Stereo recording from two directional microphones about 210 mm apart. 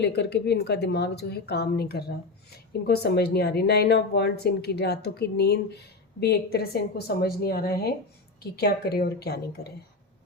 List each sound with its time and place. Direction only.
0.0 s a woman's voice: 55° left (ahead or behind)